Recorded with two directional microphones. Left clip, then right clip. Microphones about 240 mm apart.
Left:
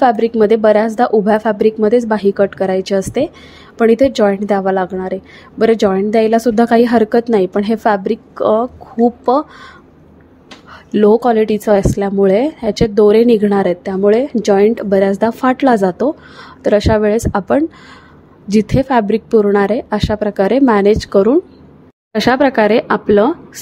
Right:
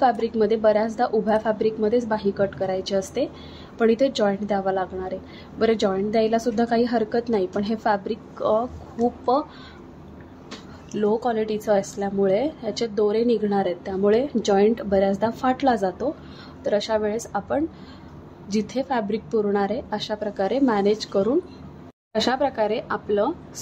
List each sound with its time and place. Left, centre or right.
0.0 s a woman's voice: left
11.0 s a woman's voice: left